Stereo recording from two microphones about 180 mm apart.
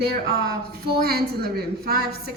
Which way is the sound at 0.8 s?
60° right (ahead or behind).